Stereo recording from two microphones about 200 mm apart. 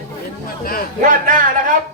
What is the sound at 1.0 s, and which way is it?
Speech, 40° right (ahead or behind).